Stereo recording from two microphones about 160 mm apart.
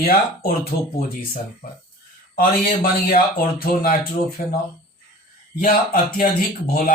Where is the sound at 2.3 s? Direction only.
70° left (ahead or behind).